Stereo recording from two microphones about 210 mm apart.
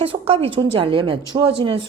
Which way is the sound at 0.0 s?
25° right (ahead or behind).